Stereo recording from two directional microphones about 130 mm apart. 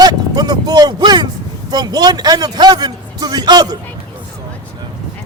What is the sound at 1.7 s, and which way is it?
Speech, 30° right (ahead or behind).